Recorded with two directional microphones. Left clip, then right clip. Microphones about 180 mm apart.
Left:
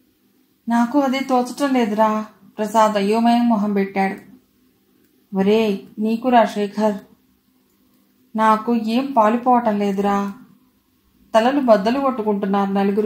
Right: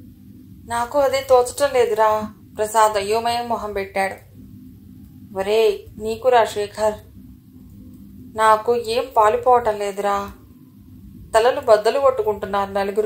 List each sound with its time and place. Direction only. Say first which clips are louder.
0.7 s speech: even; 35° right (ahead or behind)
5.3 s speech: right 1 dB; 35° right (ahead or behind)
8.4 s speech: right 1 dB; 35° right (ahead or behind)
11.3 s speech: even; 35° right (ahead or behind)